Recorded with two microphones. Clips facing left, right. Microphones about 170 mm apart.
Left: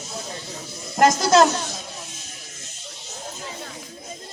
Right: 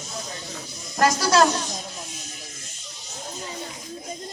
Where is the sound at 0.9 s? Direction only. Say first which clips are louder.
Left 3 dB; 20° left (ahead or behind).